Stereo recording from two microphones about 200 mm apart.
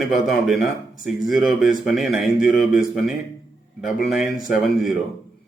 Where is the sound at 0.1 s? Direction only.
Centre (ahead or behind).